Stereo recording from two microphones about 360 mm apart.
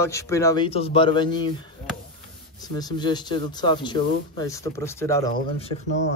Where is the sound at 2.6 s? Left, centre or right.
Centre.